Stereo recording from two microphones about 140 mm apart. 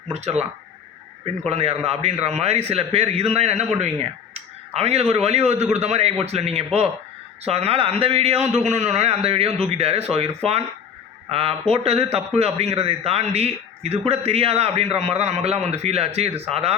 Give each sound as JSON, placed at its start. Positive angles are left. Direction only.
{"t": 0.1, "sound": "a man's voice", "side_deg": -50}